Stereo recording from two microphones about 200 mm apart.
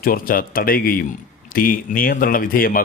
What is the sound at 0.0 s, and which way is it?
Speech, 45° left (ahead or behind).